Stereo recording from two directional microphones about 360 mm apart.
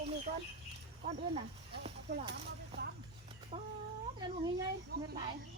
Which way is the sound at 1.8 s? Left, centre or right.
Centre.